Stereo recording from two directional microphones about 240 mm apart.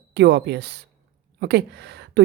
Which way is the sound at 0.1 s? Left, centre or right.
Right.